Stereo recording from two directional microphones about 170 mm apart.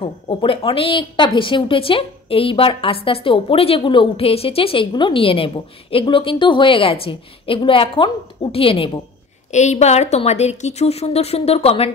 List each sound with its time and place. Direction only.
0.0 s speech: 30° left (ahead or behind)
9.5 s speech: 45° left (ahead or behind)